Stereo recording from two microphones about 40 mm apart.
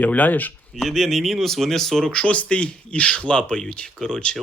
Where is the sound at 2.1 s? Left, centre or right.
Left.